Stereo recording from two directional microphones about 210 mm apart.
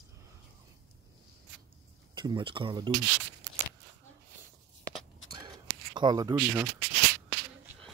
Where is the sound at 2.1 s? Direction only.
20° right (ahead or behind).